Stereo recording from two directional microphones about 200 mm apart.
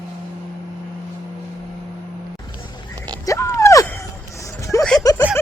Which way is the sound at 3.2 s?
15° left (ahead or behind).